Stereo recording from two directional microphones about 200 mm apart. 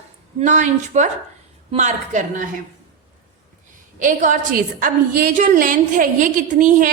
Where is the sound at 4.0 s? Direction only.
40° right (ahead or behind).